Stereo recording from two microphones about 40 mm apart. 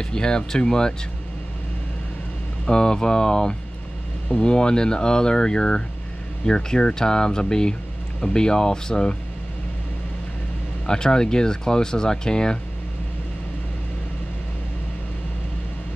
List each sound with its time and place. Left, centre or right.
0.0 s speech: centre
2.6 s speech: centre
10.9 s speech: centre